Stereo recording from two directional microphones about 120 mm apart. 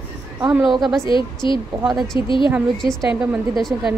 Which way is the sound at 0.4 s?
10° right (ahead or behind).